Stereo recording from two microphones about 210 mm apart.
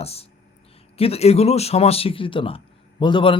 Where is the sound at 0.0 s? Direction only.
30° left (ahead or behind).